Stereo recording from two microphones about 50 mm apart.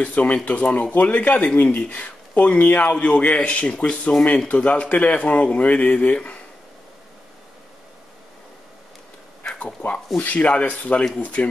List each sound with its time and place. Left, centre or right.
0.0 s speech: left
9.7 s speech: centre